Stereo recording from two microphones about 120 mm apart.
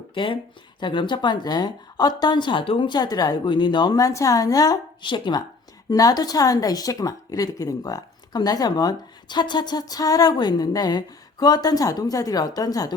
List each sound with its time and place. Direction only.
0.1 s a woman's voice: 45° left (ahead or behind)
5.9 s a woman's voice: 30° left (ahead or behind)